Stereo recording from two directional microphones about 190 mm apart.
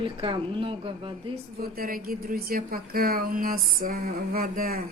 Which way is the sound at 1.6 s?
50° right (ahead or behind).